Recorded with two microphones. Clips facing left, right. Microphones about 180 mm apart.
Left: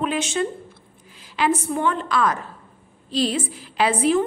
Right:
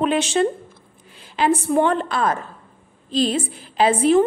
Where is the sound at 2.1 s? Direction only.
25° right (ahead or behind).